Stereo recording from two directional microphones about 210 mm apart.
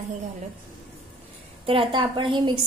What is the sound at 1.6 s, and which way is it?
Speech, 25° right (ahead or behind).